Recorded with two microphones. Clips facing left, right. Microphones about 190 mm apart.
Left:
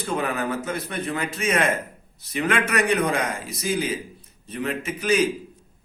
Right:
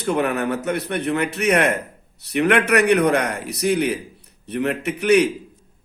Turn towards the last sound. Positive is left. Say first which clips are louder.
# right 5 dB
turn(degrees=-65)  # may be behind; listen again after turning